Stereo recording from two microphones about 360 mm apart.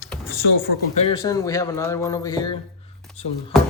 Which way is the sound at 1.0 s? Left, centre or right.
Centre.